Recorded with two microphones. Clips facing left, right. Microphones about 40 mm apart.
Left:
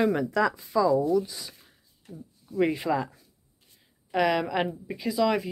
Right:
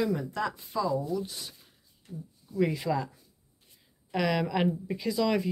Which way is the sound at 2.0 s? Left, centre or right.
Left.